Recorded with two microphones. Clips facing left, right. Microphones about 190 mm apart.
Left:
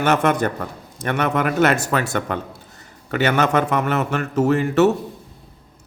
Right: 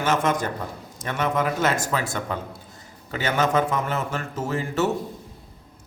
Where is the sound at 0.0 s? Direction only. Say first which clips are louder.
Left 5 dB; 65° left (ahead or behind).